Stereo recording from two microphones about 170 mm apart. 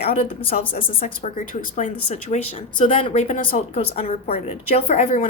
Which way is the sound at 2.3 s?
45° left (ahead or behind).